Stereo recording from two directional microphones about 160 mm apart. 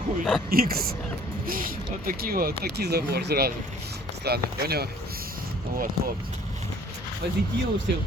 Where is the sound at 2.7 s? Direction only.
90° right.